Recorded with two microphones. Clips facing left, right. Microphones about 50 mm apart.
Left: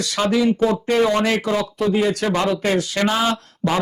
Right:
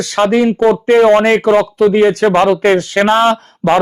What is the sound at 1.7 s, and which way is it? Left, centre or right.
Speech, right.